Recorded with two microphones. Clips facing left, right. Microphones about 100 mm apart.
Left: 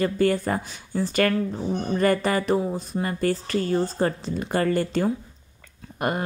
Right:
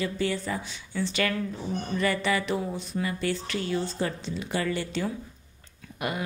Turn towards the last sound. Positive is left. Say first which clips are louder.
# left 6 dB
turn(degrees=45)  # may be behind; listen again after turning